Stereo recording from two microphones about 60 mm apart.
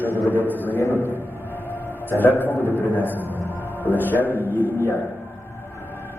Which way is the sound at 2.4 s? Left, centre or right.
Left.